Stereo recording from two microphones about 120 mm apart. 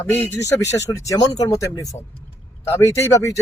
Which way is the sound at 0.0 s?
20° left (ahead or behind).